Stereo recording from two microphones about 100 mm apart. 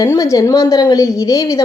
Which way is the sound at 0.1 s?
35° left (ahead or behind).